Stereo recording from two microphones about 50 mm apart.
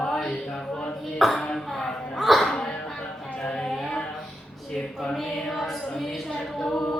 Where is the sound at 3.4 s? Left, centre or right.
Centre.